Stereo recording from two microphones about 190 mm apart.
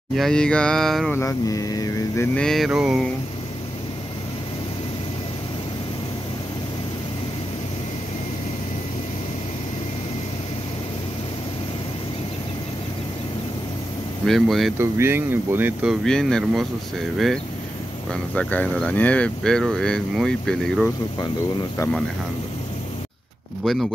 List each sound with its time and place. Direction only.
0.1 s speech: centre (ahead or behind)
1.1 s speech: 15° left (ahead or behind)
2.3 s speech: centre (ahead or behind)
14.2 s speech: centre (ahead or behind)
14.8 s speech: 15° right (ahead or behind); by 16.6 s 5° left (ahead or behind)
18.3 s speech: 5° left (ahead or behind)
23.6 s speech: centre (ahead or behind)